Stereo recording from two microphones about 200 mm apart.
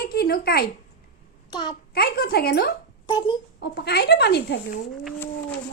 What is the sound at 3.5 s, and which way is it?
Speech, 50° left (ahead or behind).